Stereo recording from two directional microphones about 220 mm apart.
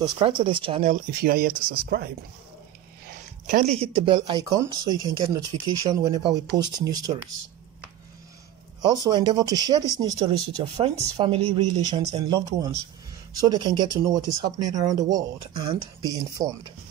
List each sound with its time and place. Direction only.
0.0 s speech: 20° right (ahead or behind)
0.9 s speech: 45° right (ahead or behind)
3.1 s a sound: 40° right (ahead or behind)
3.8 s speech: 25° right (ahead or behind)
8.8 s speech: 20° right (ahead or behind)